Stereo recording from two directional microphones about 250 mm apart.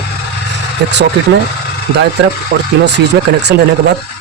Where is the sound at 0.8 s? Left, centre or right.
Right.